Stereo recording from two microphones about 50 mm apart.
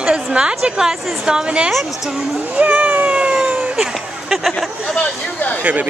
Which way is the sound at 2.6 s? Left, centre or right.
Right.